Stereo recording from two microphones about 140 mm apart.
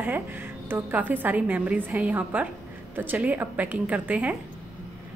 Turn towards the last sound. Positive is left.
turn(degrees=-10)  # may be behind; listen again after turning